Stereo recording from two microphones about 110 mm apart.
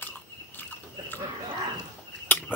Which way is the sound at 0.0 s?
15° left (ahead or behind).